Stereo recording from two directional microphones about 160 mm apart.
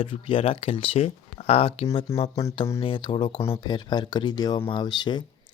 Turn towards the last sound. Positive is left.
turn(degrees=25)  # may be behind; listen again after turning